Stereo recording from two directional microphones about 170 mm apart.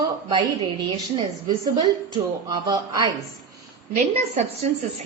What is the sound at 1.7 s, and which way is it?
A woman's voice, 25° right (ahead or behind).